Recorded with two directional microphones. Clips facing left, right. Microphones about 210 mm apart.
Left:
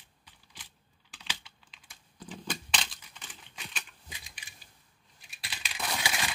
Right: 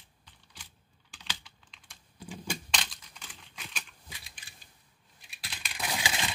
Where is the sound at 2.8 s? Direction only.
Centre (ahead or behind).